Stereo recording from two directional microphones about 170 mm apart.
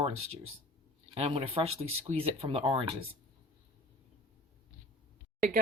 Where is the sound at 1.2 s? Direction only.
35° right (ahead or behind).